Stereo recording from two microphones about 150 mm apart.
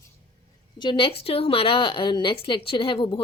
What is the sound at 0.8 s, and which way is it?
A woman's voice, 35° left (ahead or behind).